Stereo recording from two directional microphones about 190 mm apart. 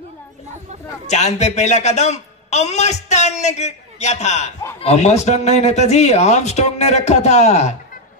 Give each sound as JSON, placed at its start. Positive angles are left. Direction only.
{"t": 1.0, "sound": "speech", "side_deg": 35}